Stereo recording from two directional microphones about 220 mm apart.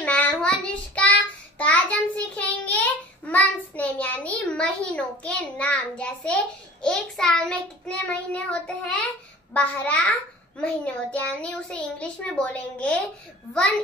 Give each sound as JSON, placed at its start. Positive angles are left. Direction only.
{"t": 0.0, "sound": "child singing", "side_deg": 5}
{"t": 9.5, "sound": "a child's voice", "side_deg": 5}